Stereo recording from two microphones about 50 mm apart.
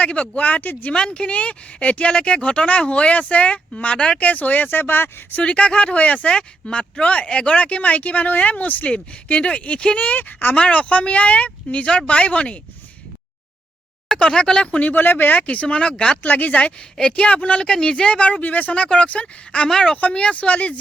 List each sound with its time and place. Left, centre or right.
0.0 s speech: left
0.9 s speech: centre; by 5.4 s left
5.4 s speech: left
14.2 s speech: centre; by 15.4 s left
15.4 s speech: left
17.6 s speech: centre
19.6 s a woman's voice: centre
20.0 s speech: left